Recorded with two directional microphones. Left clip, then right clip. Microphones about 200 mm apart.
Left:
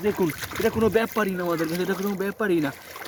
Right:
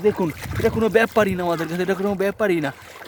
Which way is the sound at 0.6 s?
35° right (ahead or behind).